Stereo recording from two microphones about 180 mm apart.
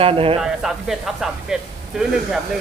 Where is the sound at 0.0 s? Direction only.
30° right (ahead or behind).